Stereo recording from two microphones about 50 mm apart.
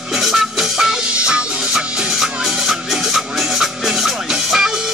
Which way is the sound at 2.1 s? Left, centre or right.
Centre.